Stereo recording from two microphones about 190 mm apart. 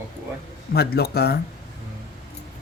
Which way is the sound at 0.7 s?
55° left (ahead or behind).